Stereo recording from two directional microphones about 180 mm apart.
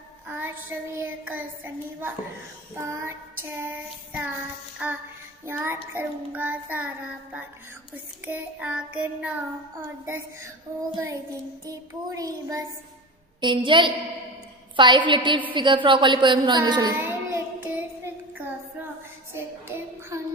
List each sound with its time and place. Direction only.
0.3 s child singing: 10° right (ahead or behind)
7.9 s child singing: 10° right (ahead or behind)
11.6 s a woman's voice: 20° right (ahead or behind)
17.0 s child singing: 10° right (ahead or behind)